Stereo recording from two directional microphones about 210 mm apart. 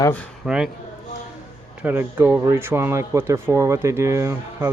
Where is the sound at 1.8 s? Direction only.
10° right (ahead or behind).